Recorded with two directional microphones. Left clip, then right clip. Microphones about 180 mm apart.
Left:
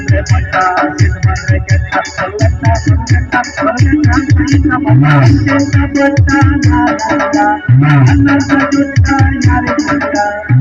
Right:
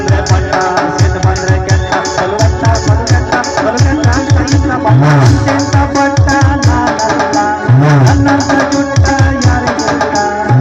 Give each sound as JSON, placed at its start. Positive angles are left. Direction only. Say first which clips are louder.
{"t": 0.5, "sound": "music", "louder": "left 2 dB", "side_deg": -35}
{"t": 3.3, "sound": "music", "louder": "even", "side_deg": -35}